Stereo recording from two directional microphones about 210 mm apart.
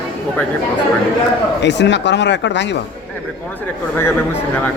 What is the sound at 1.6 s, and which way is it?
Speech, 55° left (ahead or behind).